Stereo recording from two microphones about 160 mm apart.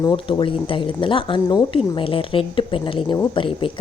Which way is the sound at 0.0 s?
30° left (ahead or behind).